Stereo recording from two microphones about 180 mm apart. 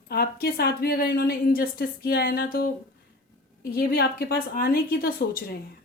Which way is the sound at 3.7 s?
60° left (ahead or behind).